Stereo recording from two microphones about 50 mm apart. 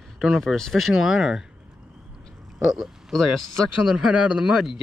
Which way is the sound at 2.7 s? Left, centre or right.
Centre.